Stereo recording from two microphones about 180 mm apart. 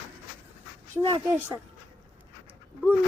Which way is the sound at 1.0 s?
30° right (ahead or behind).